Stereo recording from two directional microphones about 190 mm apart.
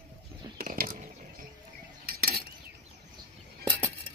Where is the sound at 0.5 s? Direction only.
50° right (ahead or behind).